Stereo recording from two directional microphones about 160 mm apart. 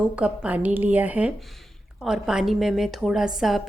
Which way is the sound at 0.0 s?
10° right (ahead or behind).